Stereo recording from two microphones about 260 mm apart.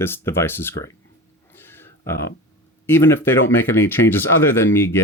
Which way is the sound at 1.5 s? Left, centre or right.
Centre.